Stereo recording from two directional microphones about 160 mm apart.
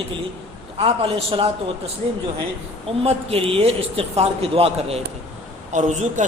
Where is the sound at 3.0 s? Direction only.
40° right (ahead or behind).